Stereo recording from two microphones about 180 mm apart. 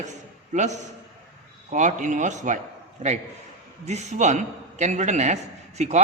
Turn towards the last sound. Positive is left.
turn(degrees=-40)  # may be behind; listen again after turning